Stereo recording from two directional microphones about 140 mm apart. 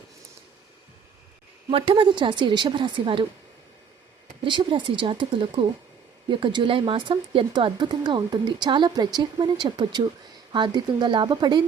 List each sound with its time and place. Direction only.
1.7 s speech: 40° right (ahead or behind)
4.4 s speech: 35° right (ahead or behind)